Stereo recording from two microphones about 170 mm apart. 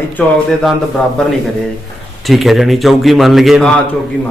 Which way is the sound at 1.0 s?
5° left (ahead or behind).